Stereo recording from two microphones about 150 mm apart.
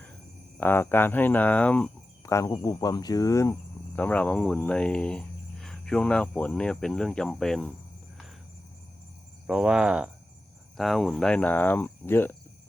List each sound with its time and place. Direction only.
0.6 s speech: 15° left (ahead or behind)
2.2 s speech: 20° left (ahead or behind)
3.9 s speech: 10° left (ahead or behind)
9.5 s cricket: 5° right (ahead or behind)
10.8 s speech: centre (ahead or behind)